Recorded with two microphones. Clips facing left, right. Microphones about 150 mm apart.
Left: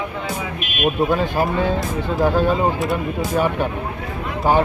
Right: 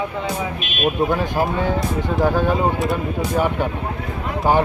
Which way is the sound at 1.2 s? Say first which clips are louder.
Left 1 dB; 15° right (ahead or behind).